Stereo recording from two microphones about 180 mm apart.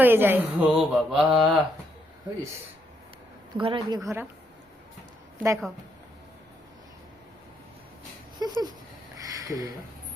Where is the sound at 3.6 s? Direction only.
25° right (ahead or behind).